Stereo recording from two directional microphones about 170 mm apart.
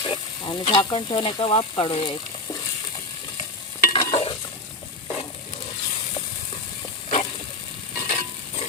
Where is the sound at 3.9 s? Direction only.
30° left (ahead or behind).